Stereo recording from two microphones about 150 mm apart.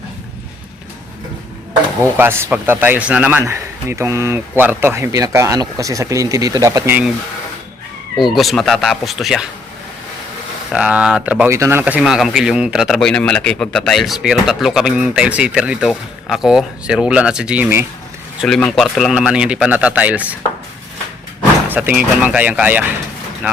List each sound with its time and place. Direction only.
2.1 s a man's voice: 15° right (ahead or behind)
8.2 s speech: centre (ahead or behind)
10.7 s speech: 5° right (ahead or behind)
18.3 s speech: centre (ahead or behind)
21.7 s a man's voice: 10° right (ahead or behind)